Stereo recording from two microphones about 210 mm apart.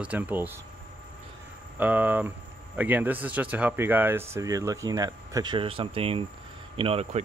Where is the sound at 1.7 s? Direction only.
5° right (ahead or behind).